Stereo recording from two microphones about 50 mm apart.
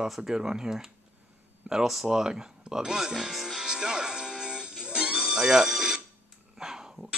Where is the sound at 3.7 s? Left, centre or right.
Centre.